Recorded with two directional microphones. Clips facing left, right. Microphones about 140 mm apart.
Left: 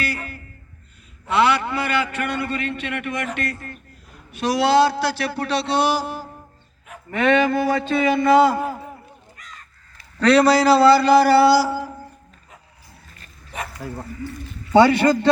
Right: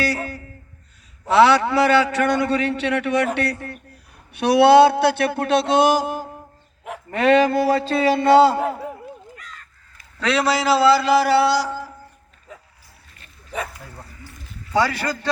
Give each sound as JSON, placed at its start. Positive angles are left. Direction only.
{"t": 1.4, "sound": "a man's voice", "side_deg": -90}
{"t": 4.3, "sound": "a man's voice", "side_deg": -65}
{"t": 10.2, "sound": "a man's voice", "side_deg": 0}
{"t": 14.7, "sound": "a man's voice", "side_deg": 25}